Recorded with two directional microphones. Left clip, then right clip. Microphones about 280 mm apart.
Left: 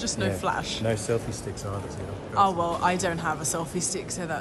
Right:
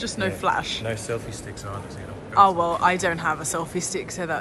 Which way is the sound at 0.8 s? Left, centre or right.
Left.